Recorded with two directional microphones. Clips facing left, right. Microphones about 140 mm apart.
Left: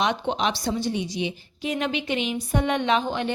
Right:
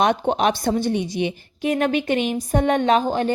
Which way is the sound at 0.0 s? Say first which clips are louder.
Right 6 dB; 50° right (ahead or behind).